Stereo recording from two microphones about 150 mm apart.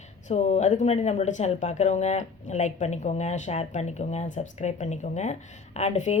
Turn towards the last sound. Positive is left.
turn(degrees=50)  # may be behind; listen again after turning